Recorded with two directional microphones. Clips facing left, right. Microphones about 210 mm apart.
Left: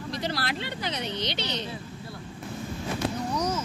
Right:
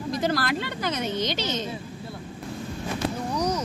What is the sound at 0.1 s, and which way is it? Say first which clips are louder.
Speech: right 6 dB; 45° right (ahead or behind).